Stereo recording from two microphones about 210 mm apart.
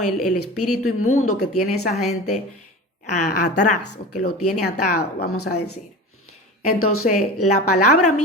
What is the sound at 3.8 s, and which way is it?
Speech, 90° left.